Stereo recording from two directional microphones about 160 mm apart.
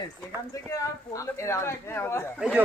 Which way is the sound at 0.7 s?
20° left (ahead or behind).